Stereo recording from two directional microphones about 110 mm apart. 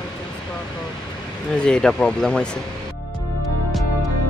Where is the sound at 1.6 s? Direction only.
5° left (ahead or behind).